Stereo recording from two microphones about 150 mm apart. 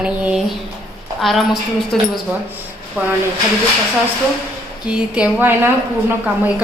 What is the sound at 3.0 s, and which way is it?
Speech, 10° right (ahead or behind).